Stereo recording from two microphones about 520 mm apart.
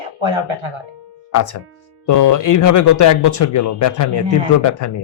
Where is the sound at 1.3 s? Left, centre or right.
Left.